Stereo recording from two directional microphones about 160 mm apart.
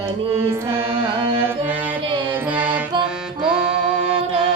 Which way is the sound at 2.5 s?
10° right (ahead or behind).